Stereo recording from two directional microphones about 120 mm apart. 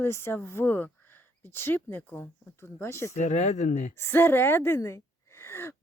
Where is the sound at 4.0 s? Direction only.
20° left (ahead or behind).